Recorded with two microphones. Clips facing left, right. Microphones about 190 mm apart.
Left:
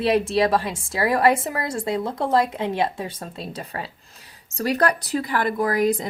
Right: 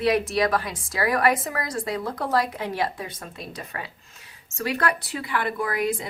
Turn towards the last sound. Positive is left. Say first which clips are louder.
# left 5 dB
turn(degrees=40)  # may be behind; listen again after turning